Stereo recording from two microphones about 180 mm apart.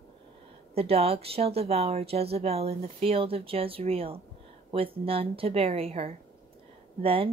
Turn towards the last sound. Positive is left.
turn(degrees=-30)  # may be behind; listen again after turning